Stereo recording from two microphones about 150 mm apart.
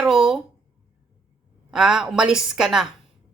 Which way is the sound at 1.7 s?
5° right (ahead or behind).